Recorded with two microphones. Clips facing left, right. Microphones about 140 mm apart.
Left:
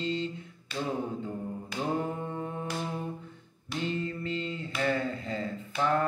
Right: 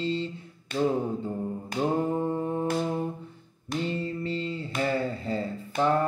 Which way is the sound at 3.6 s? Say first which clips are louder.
Right 3 dB; 30° right (ahead or behind).